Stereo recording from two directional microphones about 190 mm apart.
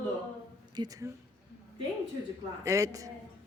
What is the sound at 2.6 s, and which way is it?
Speech, 15° right (ahead or behind).